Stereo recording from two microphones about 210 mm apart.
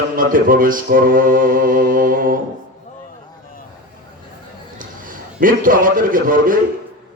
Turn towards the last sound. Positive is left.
turn(degrees=-40)  # may be behind; listen again after turning